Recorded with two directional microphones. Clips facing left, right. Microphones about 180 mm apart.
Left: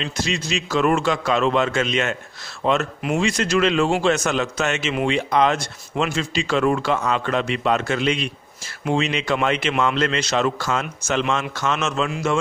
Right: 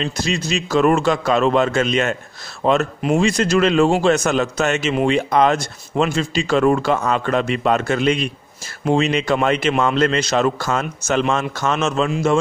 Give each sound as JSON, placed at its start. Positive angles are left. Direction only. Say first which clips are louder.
{"t": 0.0, "sound": "a man's voice", "louder": "right 3 dB", "side_deg": -40}